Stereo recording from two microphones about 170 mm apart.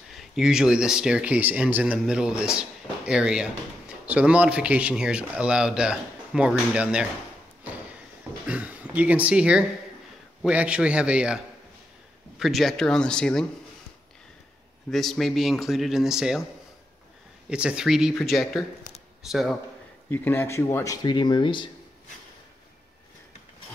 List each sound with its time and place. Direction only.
0.4 s speech: 5° right (ahead or behind)
8.5 s speech: 10° right (ahead or behind)
14.9 s speech: centre (ahead or behind)
17.5 s speech: 5° right (ahead or behind)
20.1 s speech: 15° left (ahead or behind); by 21.6 s 30° left (ahead or behind)